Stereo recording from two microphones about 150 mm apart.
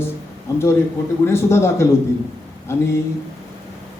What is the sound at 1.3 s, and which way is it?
A man's voice, 15° left (ahead or behind).